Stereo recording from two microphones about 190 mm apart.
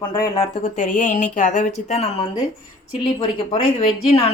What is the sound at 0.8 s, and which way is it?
Speech, 40° left (ahead or behind).